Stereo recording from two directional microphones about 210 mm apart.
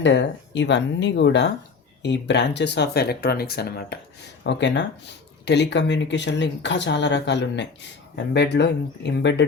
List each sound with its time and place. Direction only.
0.0 s speech: 60° left (ahead or behind)